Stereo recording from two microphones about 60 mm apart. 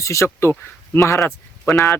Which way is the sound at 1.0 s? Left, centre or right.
Left.